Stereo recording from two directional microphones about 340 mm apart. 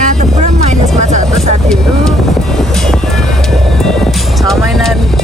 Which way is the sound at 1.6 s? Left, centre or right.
Centre.